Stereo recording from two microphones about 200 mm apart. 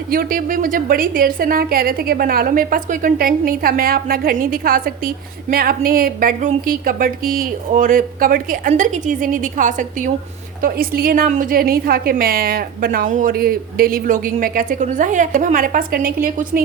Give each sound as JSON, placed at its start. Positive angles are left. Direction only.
{"t": 0.1, "sound": "a woman's voice", "side_deg": -45}